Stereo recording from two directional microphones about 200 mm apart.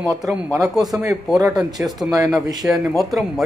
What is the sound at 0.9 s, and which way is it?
Speech, 15° right (ahead or behind).